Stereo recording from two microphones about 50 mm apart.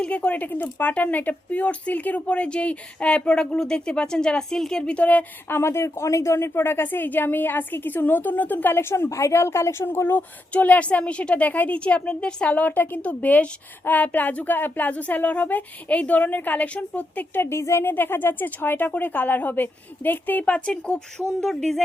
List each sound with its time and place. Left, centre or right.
0.0 s speech: left
0.4 s speech: left; by 4.8 s centre
4.8 s speech: left
5.5 s a woman's voice: left
8.8 s a woman's voice: left
9.0 s speech: left
9.8 s a woman's voice: left
10.2 s speech: left
11.8 s speech: left
12.5 s speech: left
17.3 s a woman's voice: left
17.8 s speech: left
20.4 s speech: left
21.4 s speech: centre